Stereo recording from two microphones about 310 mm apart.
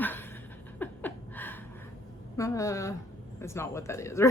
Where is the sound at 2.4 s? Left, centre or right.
Centre.